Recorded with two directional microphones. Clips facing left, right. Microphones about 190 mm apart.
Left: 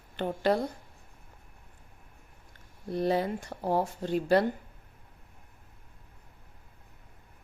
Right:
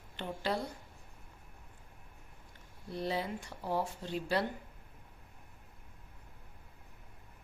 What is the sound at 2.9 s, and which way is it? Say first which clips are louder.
Speech: left 8 dB; 50° left (ahead or behind).